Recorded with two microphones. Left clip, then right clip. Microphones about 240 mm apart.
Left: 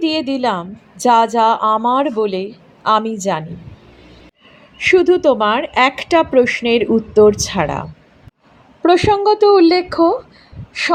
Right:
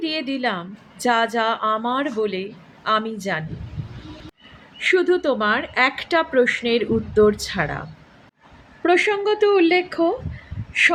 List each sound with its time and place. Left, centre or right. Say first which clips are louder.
0.0 s speech: left 7 dB; left
4.8 s speech: left 6 dB; left
8.8 s speech: left 6 dB; left